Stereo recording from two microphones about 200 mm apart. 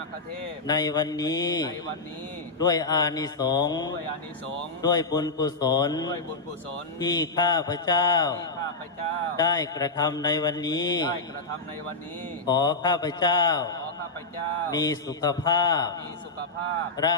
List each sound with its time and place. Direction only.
0.7 s mantra: 20° left (ahead or behind)
12.5 s mantra: 20° left (ahead or behind)
14.7 s mantra: 20° left (ahead or behind)
17.0 s mantra: 20° left (ahead or behind)